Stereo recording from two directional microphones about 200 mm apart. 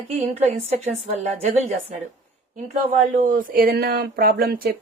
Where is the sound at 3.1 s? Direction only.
40° right (ahead or behind).